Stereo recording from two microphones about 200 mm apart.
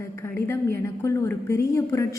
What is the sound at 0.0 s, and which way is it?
A woman's voice, 10° left (ahead or behind).